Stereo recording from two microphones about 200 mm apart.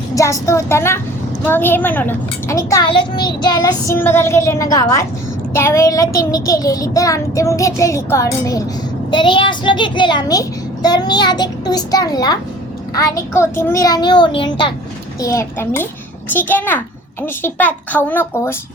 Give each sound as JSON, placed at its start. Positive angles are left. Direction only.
{"t": 0.1, "sound": "a child's voice", "side_deg": 15}